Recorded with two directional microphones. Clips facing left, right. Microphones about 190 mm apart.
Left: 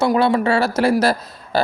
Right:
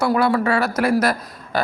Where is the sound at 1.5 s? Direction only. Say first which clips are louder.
Left 3 dB; 30° left (ahead or behind).